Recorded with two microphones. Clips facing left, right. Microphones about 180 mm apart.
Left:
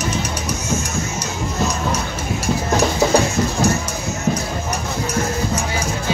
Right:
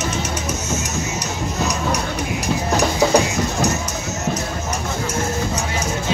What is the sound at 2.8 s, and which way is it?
Music, 15° right (ahead or behind).